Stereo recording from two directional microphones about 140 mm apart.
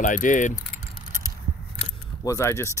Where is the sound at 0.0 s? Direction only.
65° left (ahead or behind).